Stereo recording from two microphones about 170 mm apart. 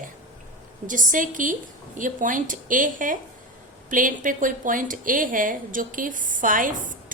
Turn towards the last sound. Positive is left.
turn(degrees=-50)  # may be behind; listen again after turning